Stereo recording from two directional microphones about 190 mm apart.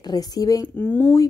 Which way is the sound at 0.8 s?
10° left (ahead or behind).